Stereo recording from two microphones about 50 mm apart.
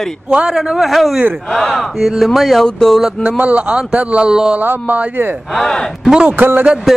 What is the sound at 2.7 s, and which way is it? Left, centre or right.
Speech, centre.